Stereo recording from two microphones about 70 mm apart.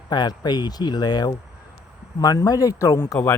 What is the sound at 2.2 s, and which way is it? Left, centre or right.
Speech, left.